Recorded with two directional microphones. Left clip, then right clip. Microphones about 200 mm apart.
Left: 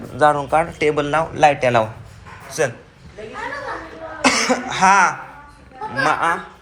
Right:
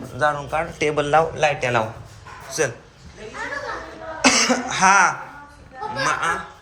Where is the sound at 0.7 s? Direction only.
15° right (ahead or behind).